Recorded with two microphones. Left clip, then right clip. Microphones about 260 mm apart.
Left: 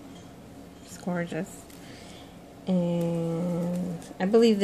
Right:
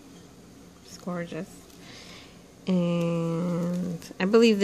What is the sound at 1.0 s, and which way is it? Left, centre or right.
Speech, centre.